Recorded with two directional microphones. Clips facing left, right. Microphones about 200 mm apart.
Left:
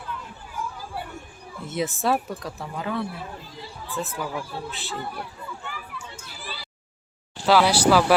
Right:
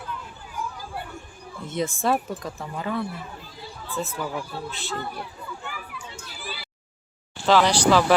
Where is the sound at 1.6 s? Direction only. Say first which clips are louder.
Even; 5° left (ahead or behind).